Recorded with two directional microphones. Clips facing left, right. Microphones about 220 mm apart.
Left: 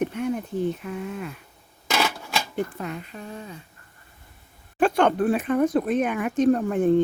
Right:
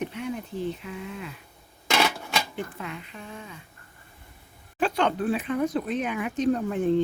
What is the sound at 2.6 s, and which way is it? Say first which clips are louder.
Speech: left 6 dB; 40° left (ahead or behind).